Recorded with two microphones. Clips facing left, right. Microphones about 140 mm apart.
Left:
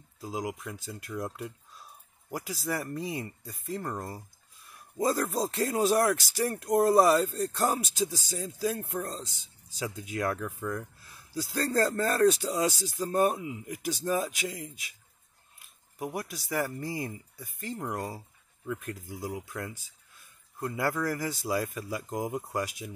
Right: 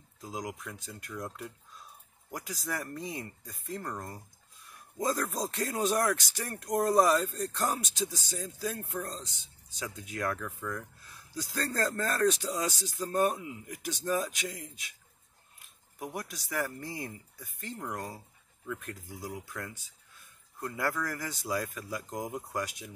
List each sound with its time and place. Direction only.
0.2 s speech: 10° left (ahead or behind)
4.9 s speech: 5° left (ahead or behind)
16.0 s speech: 10° left (ahead or behind)